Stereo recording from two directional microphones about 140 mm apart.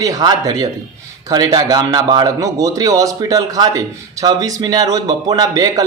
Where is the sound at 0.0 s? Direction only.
25° right (ahead or behind).